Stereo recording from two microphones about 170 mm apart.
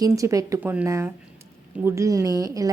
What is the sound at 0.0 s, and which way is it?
A woman's voice, 20° right (ahead or behind).